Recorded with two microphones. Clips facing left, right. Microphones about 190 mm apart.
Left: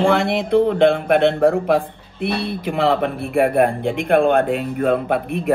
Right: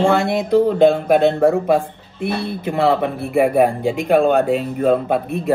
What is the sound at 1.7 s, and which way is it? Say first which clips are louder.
Speech: right 1 dB; 65° left (ahead or behind).